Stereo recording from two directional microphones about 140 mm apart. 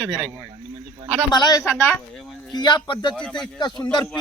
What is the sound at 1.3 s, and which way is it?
Speech, 30° left (ahead or behind).